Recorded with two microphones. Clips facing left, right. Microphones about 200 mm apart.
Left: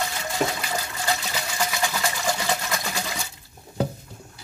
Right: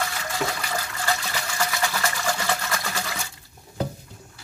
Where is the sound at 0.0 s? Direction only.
20° left (ahead or behind).